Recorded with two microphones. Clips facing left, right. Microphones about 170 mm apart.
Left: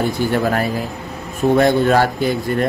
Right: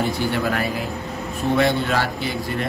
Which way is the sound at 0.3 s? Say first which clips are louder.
Left 5 dB; 45° left (ahead or behind).